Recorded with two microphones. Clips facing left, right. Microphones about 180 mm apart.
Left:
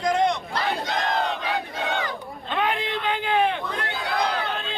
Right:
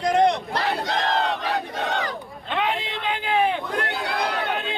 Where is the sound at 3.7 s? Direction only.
55° right (ahead or behind).